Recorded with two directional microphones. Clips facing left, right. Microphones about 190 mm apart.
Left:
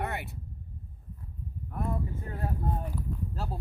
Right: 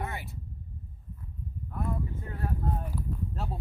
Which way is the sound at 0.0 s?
65° left (ahead or behind).